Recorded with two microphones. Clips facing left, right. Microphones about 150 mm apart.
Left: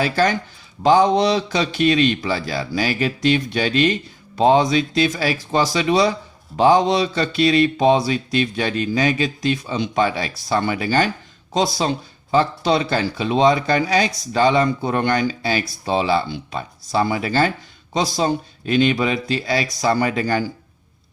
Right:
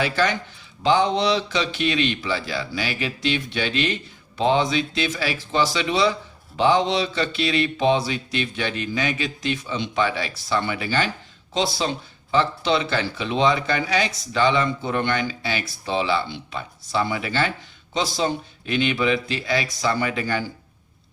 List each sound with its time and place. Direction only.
0.0 s speech: 40° left (ahead or behind)